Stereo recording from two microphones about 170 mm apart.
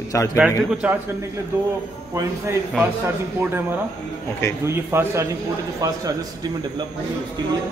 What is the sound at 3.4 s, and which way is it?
A man's voice, 10° right (ahead or behind).